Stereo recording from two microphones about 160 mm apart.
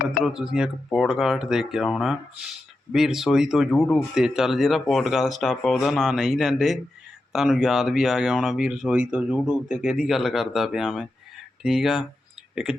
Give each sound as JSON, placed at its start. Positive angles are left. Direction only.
{"t": 0.2, "sound": "speech", "side_deg": -5}